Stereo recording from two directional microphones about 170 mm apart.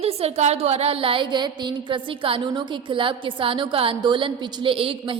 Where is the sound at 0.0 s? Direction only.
35° right (ahead or behind).